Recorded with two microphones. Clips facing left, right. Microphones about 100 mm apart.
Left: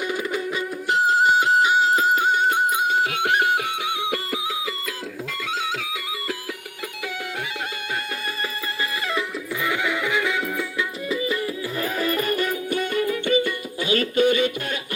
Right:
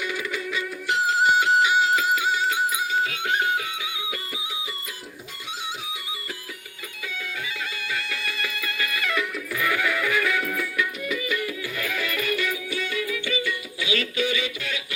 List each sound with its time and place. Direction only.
0.0 s music: 40° left (ahead or behind); by 4.7 s 90° left
5.7 s music: 90° left
7.9 s music: 45° left (ahead or behind)